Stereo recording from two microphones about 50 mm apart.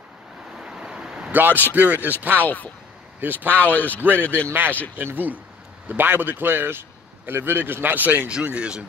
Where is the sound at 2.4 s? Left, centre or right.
Left.